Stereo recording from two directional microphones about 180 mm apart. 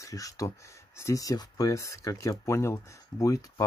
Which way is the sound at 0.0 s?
20° left (ahead or behind).